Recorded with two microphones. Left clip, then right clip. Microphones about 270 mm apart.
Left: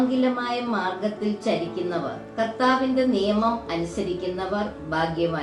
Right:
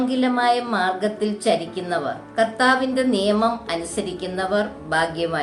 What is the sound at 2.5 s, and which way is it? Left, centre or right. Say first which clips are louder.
A woman's voice: even; right.